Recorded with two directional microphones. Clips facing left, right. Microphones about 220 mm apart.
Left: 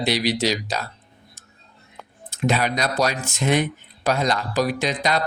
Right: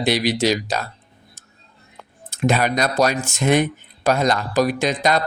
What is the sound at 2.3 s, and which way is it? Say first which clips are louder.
Speech: right 3 dB; 50° right (ahead or behind).